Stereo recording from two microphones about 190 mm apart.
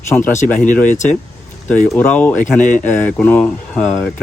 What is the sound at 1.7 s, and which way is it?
Speech, 10° left (ahead or behind).